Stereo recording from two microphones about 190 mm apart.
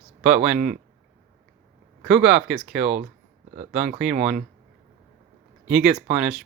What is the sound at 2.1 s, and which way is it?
Speech, 5° right (ahead or behind).